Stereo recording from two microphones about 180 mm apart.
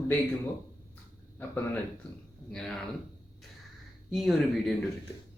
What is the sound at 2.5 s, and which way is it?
Speech, 5° left (ahead or behind).